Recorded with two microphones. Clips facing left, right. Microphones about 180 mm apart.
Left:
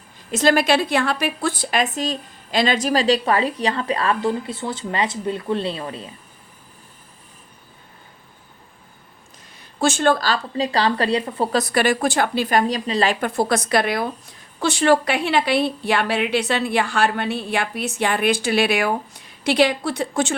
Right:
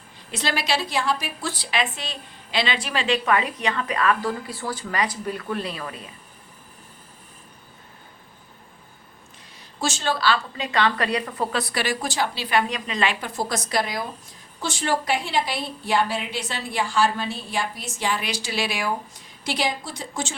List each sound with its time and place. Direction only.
0.3 s a woman's voice: 45° left (ahead or behind); by 6.1 s 30° left (ahead or behind)
9.8 s a woman's voice: 55° left (ahead or behind); by 11.4 s 30° left (ahead or behind)
11.5 s a woman's voice: 50° left (ahead or behind)
13.1 s a woman's voice: 60° left (ahead or behind)